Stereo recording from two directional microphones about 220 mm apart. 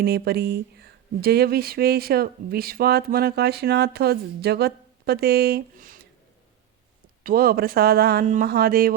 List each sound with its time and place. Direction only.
0.0 s speech: 45° right (ahead or behind)
7.3 s speech: 45° right (ahead or behind)